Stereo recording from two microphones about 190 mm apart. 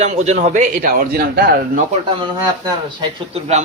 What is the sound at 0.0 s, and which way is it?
A man's voice, 35° right (ahead or behind).